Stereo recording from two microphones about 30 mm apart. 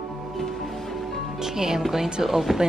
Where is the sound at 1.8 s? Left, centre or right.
Centre.